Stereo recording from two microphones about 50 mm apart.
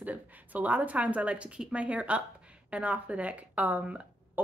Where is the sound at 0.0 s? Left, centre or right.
Right.